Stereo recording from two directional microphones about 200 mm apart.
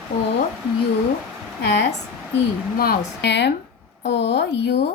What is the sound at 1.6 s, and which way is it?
Speech, 60° left (ahead or behind).